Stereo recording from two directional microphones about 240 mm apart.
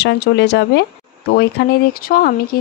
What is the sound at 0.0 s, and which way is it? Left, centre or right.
A woman's voice, left.